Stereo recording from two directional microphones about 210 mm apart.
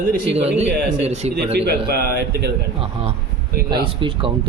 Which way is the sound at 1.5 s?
50° right (ahead or behind).